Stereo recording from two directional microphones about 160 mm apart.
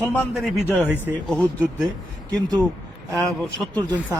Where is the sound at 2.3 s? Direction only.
25° right (ahead or behind).